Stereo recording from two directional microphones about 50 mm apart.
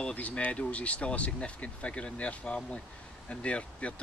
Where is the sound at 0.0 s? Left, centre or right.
Left.